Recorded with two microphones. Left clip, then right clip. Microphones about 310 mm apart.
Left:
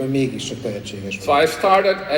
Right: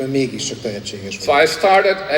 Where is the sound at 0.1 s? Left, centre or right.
Right.